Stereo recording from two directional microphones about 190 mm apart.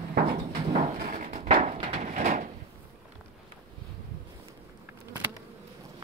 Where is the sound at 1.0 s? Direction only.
40° right (ahead or behind).